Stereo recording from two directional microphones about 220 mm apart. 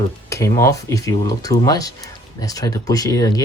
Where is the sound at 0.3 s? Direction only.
15° left (ahead or behind).